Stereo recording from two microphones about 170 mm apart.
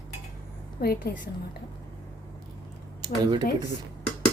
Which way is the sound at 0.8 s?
65° left (ahead or behind).